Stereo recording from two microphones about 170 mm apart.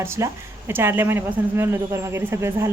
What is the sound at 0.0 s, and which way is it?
A woman's voice, 15° right (ahead or behind).